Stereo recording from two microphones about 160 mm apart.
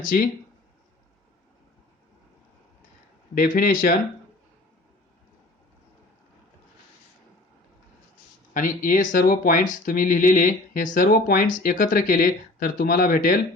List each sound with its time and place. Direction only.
0.0 s speech: 60° left (ahead or behind)
3.3 s speech: 60° left (ahead or behind)
8.5 s speech: 60° left (ahead or behind)